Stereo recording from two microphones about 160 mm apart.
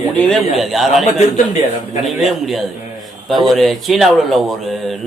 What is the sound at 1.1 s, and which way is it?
Speech, 45° left (ahead or behind).